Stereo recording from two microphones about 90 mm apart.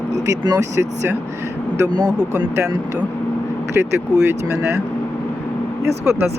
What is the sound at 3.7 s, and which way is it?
Speech, 25° right (ahead or behind).